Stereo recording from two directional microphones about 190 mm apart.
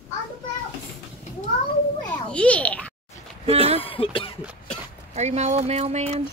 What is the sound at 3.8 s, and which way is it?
Speech, 30° left (ahead or behind).